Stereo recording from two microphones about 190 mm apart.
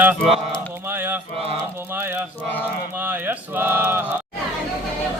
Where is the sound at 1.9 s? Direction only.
10° right (ahead or behind).